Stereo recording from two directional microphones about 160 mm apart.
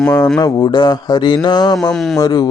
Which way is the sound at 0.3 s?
20° left (ahead or behind).